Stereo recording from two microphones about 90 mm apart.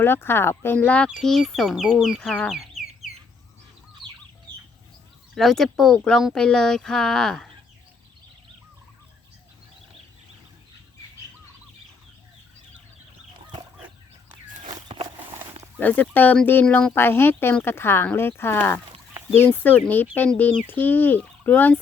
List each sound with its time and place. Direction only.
0.0 s speech: 25° left (ahead or behind); by 2.3 s centre (ahead or behind)
2.5 s a sound: 5° right (ahead or behind)
4.0 s chicken: 65° right (ahead or behind)
5.3 s speech: centre (ahead or behind)
13.7 s chicken: 15° right (ahead or behind)
15.8 s speech: 20° left (ahead or behind)
16.9 s speech: 25° left (ahead or behind)